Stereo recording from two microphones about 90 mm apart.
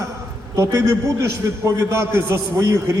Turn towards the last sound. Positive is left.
turn(degrees=-35)  # may be behind; listen again after turning